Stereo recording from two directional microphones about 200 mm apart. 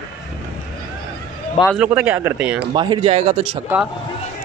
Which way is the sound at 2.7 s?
25° right (ahead or behind).